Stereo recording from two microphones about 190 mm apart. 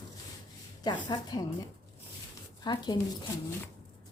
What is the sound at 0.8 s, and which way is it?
Speech, 20° left (ahead or behind).